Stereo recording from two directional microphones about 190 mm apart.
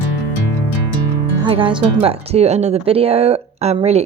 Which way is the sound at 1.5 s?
25° right (ahead or behind).